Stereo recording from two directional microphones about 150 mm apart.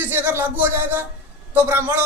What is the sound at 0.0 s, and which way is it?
Speech, 15° right (ahead or behind).